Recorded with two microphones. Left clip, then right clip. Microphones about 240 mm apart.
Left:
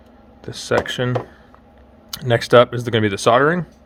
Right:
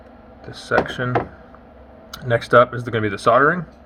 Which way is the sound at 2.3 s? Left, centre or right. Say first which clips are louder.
Left 1 dB; left.